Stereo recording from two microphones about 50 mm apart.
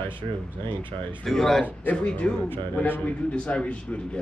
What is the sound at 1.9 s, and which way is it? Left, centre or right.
A man's voice, left.